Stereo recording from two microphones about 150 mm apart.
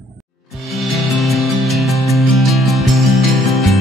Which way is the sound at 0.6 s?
Centre (ahead or behind).